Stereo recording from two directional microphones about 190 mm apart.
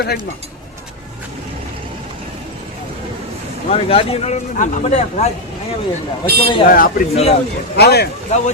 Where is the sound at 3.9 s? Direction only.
30° left (ahead or behind).